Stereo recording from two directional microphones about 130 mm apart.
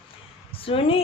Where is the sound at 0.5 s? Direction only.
45° left (ahead or behind).